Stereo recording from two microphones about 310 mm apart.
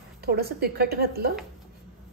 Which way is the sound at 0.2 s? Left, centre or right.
Right.